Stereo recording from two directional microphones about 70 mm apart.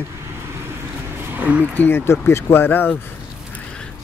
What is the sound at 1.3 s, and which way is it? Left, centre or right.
Speech, right.